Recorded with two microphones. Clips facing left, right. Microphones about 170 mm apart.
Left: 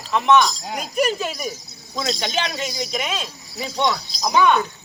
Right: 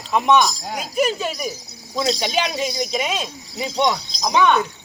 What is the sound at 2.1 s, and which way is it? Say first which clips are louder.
Speech: right 2 dB; 15° right (ahead or behind).